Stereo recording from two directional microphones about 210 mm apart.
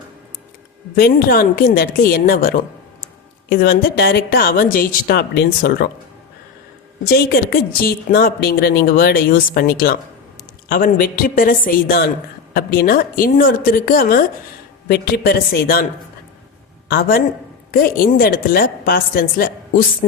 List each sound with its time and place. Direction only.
0.9 s a woman's voice: 45° left (ahead or behind)
7.0 s a woman's voice: 45° left (ahead or behind)
16.9 s a woman's voice: 45° left (ahead or behind)